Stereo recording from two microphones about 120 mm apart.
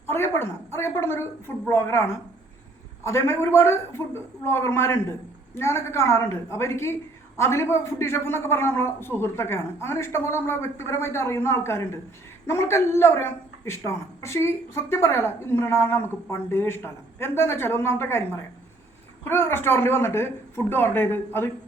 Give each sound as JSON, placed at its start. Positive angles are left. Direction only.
{"t": 0.1, "sound": "a woman's voice", "side_deg": 20}